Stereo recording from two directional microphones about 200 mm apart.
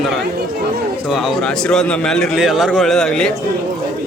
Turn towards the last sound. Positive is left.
turn(degrees=5)  # may be behind; listen again after turning